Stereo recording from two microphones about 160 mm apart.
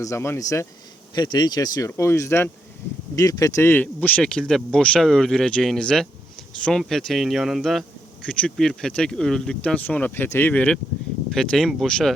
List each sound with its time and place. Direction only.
0.0 s speech: 15° left (ahead or behind)